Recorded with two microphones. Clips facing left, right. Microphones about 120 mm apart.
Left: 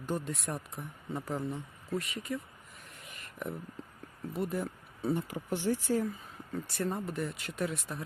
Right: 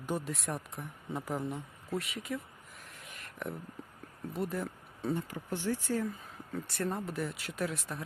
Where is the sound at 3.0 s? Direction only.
Centre (ahead or behind).